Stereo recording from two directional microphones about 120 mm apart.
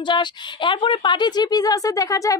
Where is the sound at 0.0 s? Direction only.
40° left (ahead or behind).